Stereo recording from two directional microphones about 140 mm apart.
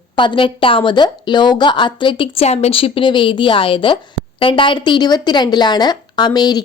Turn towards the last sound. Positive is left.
turn(degrees=30)  # may be behind; listen again after turning